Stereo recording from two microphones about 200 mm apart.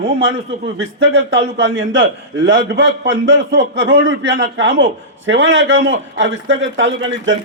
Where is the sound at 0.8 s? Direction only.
70° right (ahead or behind).